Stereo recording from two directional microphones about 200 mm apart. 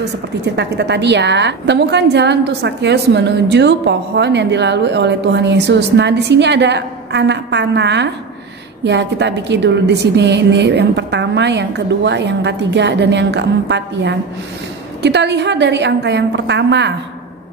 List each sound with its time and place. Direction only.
0.6 s a woman's voice: 60° right (ahead or behind)